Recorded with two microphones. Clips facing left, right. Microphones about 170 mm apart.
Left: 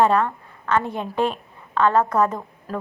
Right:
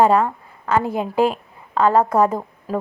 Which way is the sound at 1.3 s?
35° right (ahead or behind).